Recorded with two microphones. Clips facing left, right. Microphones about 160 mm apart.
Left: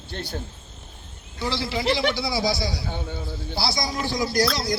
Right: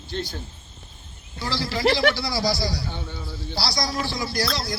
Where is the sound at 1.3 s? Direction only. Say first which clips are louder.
Left 1 dB; 20° left (ahead or behind).